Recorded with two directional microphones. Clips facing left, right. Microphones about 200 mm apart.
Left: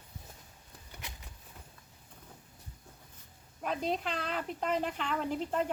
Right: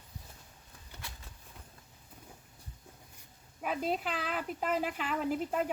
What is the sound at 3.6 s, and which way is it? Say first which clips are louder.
Speech: even; 5° right (ahead or behind).